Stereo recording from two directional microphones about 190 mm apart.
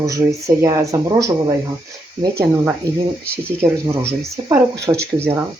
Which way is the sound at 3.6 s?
15° right (ahead or behind).